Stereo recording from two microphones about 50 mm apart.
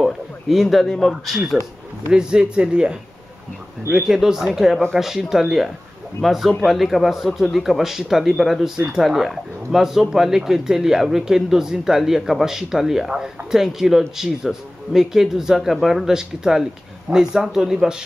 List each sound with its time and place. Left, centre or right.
0.0 s speech: centre
2.1 s speech: centre
4.1 s speech: centre
8.7 s speech: centre
9.0 s speech: centre